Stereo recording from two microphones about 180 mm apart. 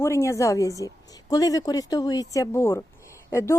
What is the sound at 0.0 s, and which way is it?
Speech, 15° left (ahead or behind).